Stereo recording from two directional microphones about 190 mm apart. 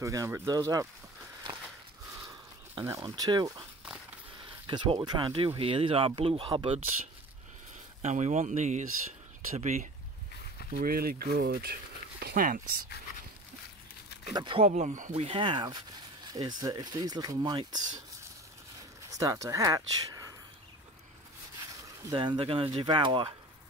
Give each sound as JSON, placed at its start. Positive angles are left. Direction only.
{"t": 0.0, "sound": "speech", "side_deg": -15}
{"t": 2.1, "sound": "a sound", "side_deg": -15}
{"t": 4.6, "sound": "speech", "side_deg": -25}
{"t": 8.0, "sound": "speech", "side_deg": -40}
{"t": 10.7, "sound": "speech", "side_deg": -50}
{"t": 14.3, "sound": "speech", "side_deg": -25}
{"t": 19.0, "sound": "speech", "side_deg": -15}
{"t": 21.8, "sound": "speech", "side_deg": -25}